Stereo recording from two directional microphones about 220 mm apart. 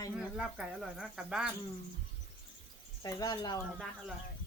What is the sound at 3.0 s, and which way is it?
Speech, 15° left (ahead or behind).